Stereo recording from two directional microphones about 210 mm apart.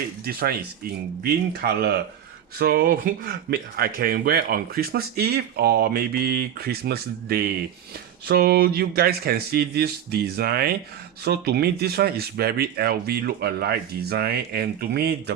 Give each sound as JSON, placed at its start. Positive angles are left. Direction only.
{"t": 0.3, "sound": "speech", "side_deg": -45}